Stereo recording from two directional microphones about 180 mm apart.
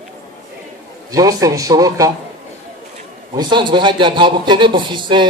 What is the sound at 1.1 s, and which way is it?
A man's voice, 20° right (ahead or behind).